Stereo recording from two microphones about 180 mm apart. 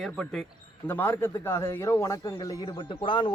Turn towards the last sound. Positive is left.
turn(degrees=25)  # may be behind; listen again after turning